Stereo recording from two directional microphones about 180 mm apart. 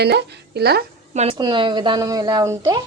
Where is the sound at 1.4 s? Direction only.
25° right (ahead or behind).